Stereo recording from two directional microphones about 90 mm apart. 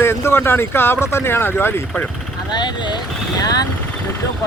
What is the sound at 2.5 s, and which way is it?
Speech, 50° left (ahead or behind).